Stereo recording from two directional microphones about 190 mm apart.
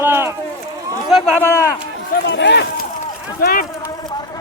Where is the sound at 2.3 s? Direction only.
65° left (ahead or behind).